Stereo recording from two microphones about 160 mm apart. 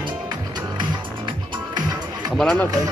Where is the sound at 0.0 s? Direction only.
25° right (ahead or behind).